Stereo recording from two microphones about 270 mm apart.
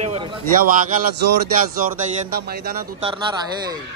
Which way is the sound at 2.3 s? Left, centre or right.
Right.